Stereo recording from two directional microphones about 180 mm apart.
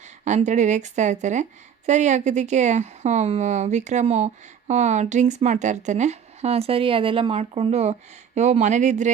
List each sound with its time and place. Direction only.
0.3 s a woman's voice: 40° right (ahead or behind)